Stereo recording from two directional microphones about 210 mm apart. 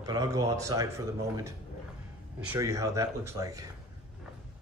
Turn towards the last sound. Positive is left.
turn(degrees=-15)  # may be behind; listen again after turning